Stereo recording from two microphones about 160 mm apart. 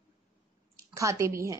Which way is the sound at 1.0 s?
20° right (ahead or behind).